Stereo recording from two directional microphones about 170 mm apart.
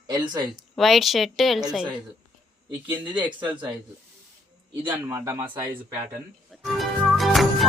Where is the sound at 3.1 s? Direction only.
25° right (ahead or behind).